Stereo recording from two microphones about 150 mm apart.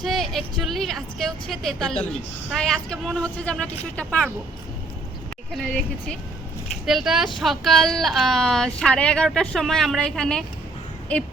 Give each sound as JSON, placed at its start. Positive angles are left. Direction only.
{"t": 0.0, "sound": "a woman's voice", "side_deg": 0}
{"t": 5.5, "sound": "a woman's voice", "side_deg": 5}